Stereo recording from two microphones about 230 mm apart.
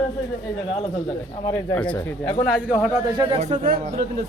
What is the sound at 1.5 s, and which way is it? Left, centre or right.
Speech, centre.